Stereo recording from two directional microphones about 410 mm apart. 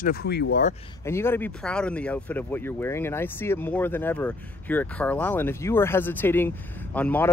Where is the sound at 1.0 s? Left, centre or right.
Centre.